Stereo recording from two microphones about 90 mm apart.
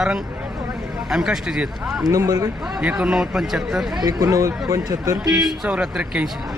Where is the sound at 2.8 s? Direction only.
10° right (ahead or behind).